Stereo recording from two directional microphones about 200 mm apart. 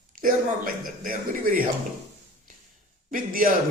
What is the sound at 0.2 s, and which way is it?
Speech, 45° right (ahead or behind).